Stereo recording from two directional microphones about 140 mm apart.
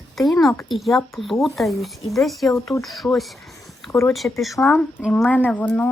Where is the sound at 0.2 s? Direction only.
Centre (ahead or behind).